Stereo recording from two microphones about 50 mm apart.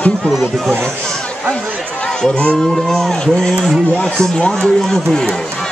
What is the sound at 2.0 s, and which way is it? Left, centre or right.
Speech, centre.